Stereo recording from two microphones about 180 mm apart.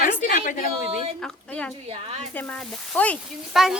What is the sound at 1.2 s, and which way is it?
Speech, 5° left (ahead or behind).